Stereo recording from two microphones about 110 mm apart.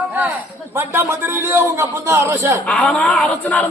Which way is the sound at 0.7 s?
25° right (ahead or behind).